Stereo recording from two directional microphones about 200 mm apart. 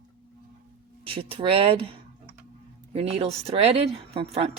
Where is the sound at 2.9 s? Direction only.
30° right (ahead or behind).